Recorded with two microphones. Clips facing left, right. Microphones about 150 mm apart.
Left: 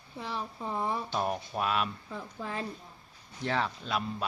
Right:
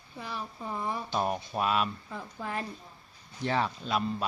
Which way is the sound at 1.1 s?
Centre (ahead or behind).